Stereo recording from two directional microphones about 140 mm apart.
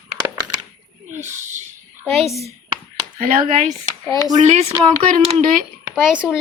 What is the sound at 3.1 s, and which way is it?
Speech, 70° right (ahead or behind).